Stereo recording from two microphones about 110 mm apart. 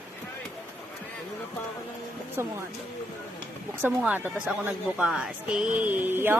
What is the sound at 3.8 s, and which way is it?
Speech, 15° right (ahead or behind).